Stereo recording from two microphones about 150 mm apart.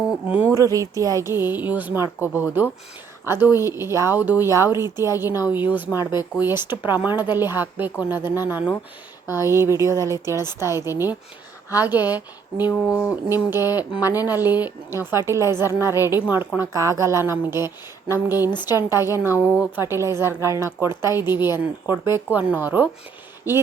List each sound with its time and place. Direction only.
0.3 s speech: 10° right (ahead or behind)
0.5 s speech: 20° right (ahead or behind)